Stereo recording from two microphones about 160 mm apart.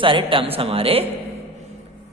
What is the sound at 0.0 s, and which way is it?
A man's voice, 30° right (ahead or behind).